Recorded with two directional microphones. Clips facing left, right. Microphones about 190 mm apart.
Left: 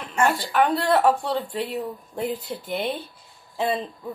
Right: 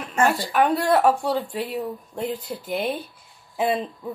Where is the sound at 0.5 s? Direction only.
15° right (ahead or behind).